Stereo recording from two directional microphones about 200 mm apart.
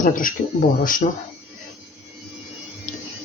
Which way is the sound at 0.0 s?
45° left (ahead or behind).